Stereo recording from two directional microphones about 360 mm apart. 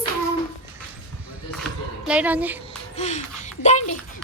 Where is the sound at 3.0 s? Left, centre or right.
Centre.